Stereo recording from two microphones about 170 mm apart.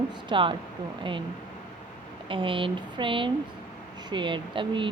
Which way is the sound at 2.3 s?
30° right (ahead or behind).